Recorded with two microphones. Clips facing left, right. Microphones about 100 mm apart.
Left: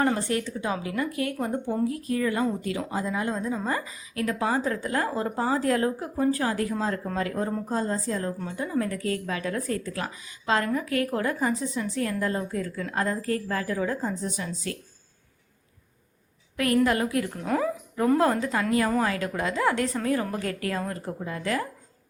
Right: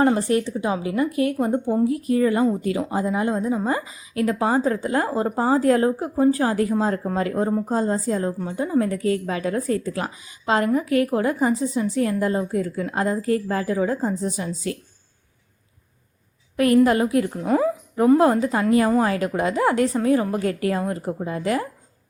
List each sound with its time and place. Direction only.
0.2 s a woman's voice: 25° right (ahead or behind)
16.6 s a woman's voice: 25° right (ahead or behind)